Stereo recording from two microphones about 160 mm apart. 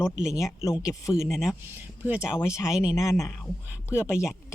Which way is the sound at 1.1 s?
5° right (ahead or behind).